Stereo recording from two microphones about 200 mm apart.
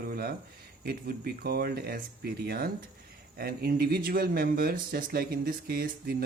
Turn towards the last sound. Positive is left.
turn(degrees=-50)  # may be behind; listen again after turning